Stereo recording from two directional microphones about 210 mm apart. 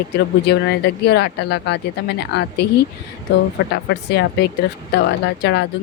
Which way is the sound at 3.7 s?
50° left (ahead or behind).